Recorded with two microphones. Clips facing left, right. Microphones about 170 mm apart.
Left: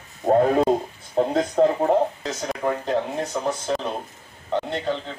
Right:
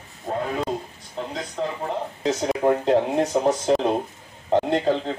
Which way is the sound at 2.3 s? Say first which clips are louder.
Right 5 dB; 25° right (ahead or behind).